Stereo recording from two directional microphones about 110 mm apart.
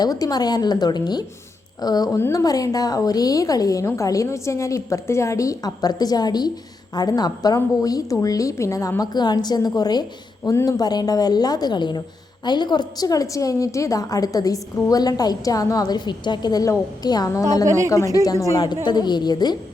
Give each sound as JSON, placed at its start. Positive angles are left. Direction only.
{"t": 0.0, "sound": "a woman's voice", "side_deg": 35}